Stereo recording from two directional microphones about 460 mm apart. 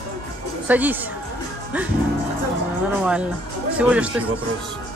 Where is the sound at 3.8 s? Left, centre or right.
Centre.